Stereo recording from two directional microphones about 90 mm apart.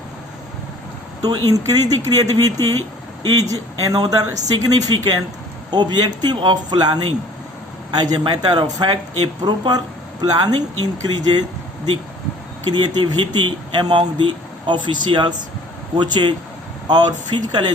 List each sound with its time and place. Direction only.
1.2 s speech: 45° right (ahead or behind)
12.7 s speech: 60° right (ahead or behind)